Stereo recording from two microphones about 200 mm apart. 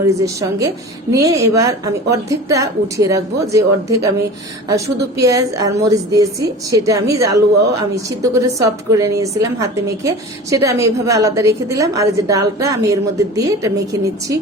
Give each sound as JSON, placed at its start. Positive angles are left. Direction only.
{"t": 0.0, "sound": "a woman's voice", "side_deg": -15}